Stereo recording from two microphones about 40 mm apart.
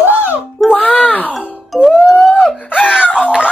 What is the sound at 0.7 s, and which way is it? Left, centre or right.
Groan, left.